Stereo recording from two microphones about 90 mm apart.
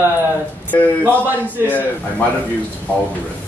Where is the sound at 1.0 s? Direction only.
25° right (ahead or behind).